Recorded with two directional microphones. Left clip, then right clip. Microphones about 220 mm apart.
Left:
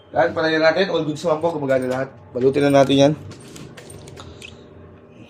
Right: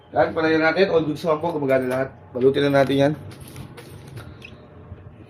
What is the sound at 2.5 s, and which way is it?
Speech, 15° left (ahead or behind).